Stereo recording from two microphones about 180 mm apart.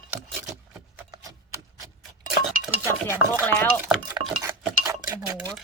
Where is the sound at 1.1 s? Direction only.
20° right (ahead or behind).